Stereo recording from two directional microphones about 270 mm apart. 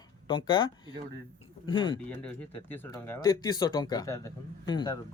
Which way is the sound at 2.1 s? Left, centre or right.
Centre.